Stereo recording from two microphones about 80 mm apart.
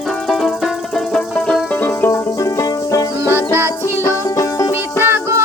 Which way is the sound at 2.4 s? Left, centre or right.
Left.